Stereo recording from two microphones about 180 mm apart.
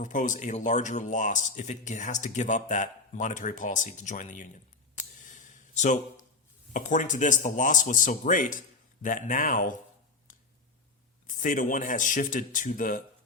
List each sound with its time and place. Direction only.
0.0 s speech: 45° left (ahead or behind)
5.2 s a sound: 45° left (ahead or behind)
6.7 s speech: 45° left (ahead or behind)
11.3 s speech: 45° left (ahead or behind)